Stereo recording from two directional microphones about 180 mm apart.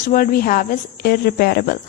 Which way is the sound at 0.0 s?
50° left (ahead or behind).